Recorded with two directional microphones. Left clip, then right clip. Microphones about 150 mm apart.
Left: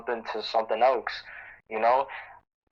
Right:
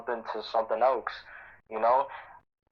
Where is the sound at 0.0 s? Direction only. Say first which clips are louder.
Left 2 dB; 25° left (ahead or behind).